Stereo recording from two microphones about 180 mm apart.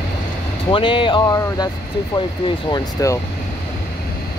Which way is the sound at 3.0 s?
20° left (ahead or behind).